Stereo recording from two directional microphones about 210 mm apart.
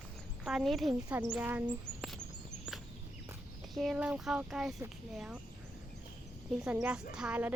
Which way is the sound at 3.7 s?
5° right (ahead or behind).